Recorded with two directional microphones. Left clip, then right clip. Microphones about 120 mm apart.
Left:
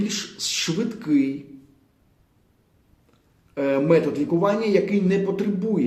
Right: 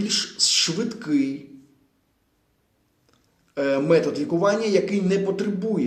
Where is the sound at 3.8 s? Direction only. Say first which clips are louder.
Left 1 dB; 10° left (ahead or behind).